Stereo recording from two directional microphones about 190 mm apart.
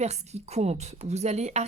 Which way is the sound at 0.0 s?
35° right (ahead or behind).